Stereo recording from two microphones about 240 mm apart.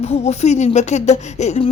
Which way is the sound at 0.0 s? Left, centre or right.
Left.